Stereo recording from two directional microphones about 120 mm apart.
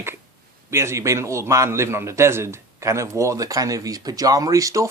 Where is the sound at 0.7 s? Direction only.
25° right (ahead or behind).